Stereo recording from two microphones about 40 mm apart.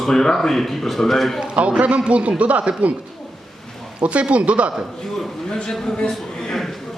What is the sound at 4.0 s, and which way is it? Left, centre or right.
Speech, right.